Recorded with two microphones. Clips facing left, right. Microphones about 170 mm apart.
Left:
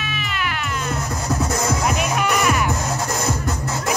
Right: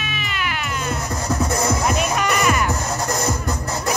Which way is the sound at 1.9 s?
Centre (ahead or behind).